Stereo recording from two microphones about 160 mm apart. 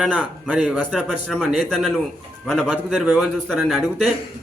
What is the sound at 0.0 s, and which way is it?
A man's voice, 5° right (ahead or behind).